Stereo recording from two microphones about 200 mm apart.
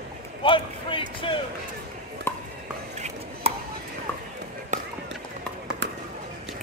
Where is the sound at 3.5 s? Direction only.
30° right (ahead or behind).